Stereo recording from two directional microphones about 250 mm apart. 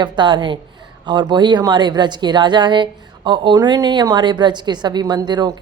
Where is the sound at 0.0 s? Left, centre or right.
Centre.